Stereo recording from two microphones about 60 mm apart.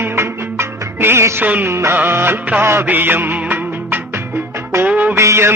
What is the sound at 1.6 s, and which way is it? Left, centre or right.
Speech, right.